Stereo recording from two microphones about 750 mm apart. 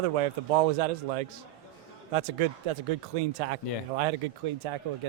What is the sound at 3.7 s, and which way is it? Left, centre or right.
Speech, left.